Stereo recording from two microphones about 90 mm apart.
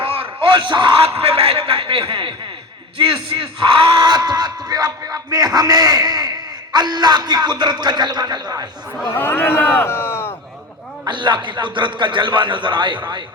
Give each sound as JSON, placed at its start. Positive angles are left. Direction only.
{"t": 0.0, "sound": "a man's voice", "side_deg": -90}
{"t": 3.3, "sound": "speech", "side_deg": -75}
{"t": 4.0, "sound": "speech", "side_deg": -45}
{"t": 9.1, "sound": "a man's voice", "side_deg": 25}
{"t": 11.1, "sound": "a man's voice", "side_deg": -60}